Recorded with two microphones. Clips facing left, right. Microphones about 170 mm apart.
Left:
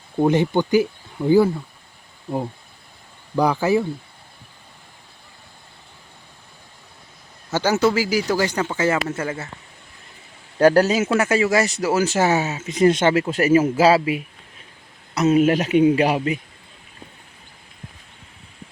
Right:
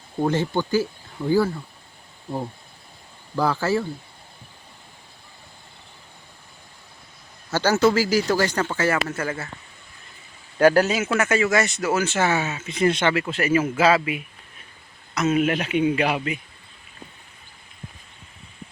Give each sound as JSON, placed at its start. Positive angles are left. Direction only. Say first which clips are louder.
{"t": 0.2, "sound": "speech", "louder": "left 5 dB", "side_deg": 20}
{"t": 3.3, "sound": "speech", "louder": "left 4 dB", "side_deg": 15}
{"t": 7.5, "sound": "speech", "louder": "even", "side_deg": 15}
{"t": 10.6, "sound": "speech", "louder": "left 2 dB", "side_deg": 35}